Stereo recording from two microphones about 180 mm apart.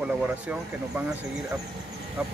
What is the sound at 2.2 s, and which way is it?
Speech, 10° right (ahead or behind).